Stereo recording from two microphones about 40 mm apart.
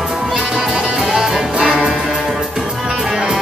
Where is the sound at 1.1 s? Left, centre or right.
Centre.